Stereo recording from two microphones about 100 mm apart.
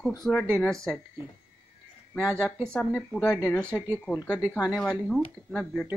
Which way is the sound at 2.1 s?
10° left (ahead or behind).